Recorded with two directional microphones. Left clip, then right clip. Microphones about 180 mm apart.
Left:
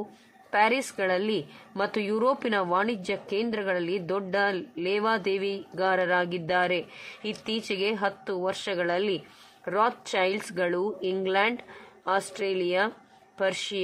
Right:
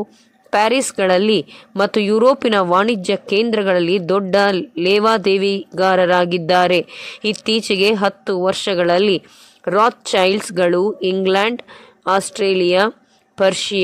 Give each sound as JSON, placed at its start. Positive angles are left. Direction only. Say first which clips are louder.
{"t": 0.5, "sound": "a woman's voice", "louder": "right 9 dB", "side_deg": -45}